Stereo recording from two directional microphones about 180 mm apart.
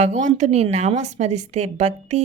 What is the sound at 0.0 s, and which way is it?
A woman's voice, 40° right (ahead or behind).